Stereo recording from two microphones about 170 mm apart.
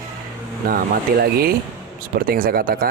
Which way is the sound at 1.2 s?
65° right (ahead or behind).